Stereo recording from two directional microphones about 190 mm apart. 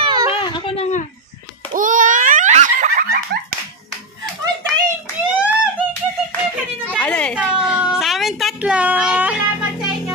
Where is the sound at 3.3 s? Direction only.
60° right (ahead or behind).